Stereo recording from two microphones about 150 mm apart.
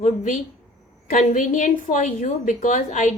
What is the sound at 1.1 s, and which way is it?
A woman's voice, 60° left (ahead or behind).